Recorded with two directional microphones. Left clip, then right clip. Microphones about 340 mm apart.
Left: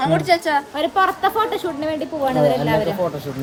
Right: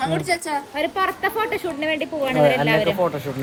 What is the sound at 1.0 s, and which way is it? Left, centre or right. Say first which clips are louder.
Speech: left 4 dB; left.